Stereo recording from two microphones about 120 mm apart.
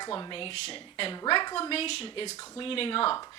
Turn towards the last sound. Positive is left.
turn(degrees=50)  # may be behind; listen again after turning